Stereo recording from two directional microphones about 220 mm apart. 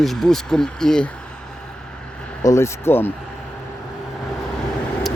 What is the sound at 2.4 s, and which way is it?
Speech, 15° left (ahead or behind).